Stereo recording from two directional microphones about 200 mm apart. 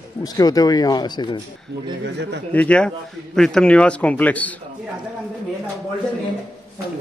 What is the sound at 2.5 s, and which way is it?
A man's voice, 5° left (ahead or behind).